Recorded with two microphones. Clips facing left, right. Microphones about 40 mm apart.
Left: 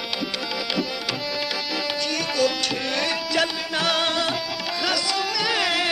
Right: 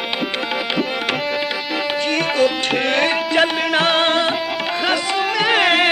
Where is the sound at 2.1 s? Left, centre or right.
Right.